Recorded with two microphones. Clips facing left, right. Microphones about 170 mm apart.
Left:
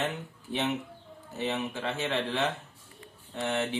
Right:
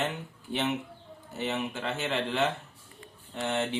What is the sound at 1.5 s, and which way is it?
Speech, 20° right (ahead or behind).